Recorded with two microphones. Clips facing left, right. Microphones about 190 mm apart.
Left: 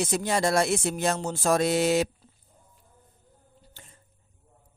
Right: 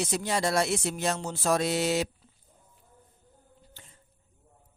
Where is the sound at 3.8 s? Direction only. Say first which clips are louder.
Left 3 dB; 45° left (ahead or behind).